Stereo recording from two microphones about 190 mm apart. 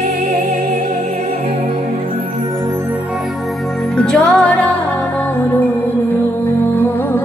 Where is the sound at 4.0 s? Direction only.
5° left (ahead or behind).